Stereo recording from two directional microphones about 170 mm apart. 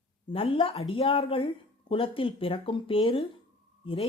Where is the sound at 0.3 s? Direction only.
30° left (ahead or behind).